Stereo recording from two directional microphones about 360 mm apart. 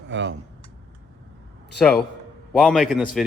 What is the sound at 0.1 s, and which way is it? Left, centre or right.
Speech, right.